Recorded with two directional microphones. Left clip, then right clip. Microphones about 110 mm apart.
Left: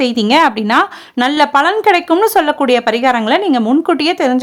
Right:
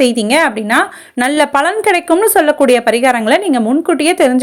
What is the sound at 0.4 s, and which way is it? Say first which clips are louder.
Speech: left 1 dB; 20° left (ahead or behind).